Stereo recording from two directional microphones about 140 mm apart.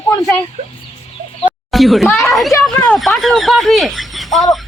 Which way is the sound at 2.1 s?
Centre (ahead or behind).